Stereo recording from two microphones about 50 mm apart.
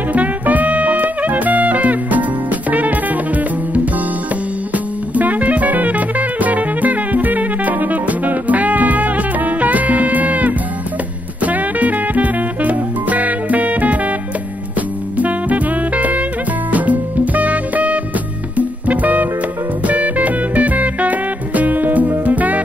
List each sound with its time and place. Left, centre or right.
0.1 s music: right
15.1 s music: right